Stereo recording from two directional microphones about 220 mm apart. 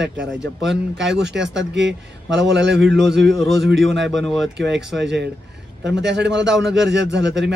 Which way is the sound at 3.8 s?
55° right (ahead or behind).